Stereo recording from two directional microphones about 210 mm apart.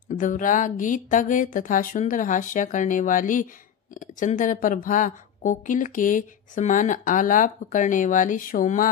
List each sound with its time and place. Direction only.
0.1 s speech: 40° left (ahead or behind)